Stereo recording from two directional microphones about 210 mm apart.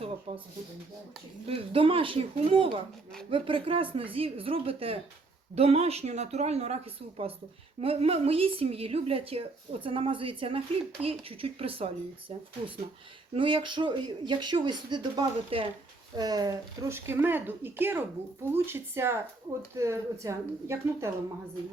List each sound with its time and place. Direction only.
0.3 s a woman's voice: 25° right (ahead or behind)
1.5 s a woman's voice: 25° right (ahead or behind)